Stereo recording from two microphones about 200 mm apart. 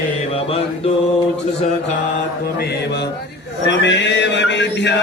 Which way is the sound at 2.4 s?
55° left (ahead or behind).